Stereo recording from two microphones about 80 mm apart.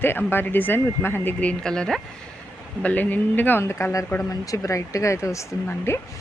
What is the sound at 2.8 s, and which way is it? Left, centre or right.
Speech, left.